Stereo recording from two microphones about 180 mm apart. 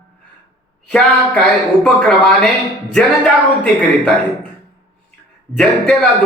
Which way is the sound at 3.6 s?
5° left (ahead or behind).